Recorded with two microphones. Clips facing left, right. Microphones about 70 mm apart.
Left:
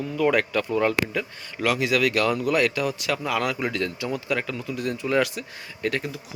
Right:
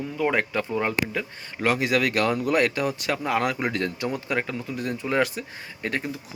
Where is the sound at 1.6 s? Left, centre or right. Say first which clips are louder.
Even; right.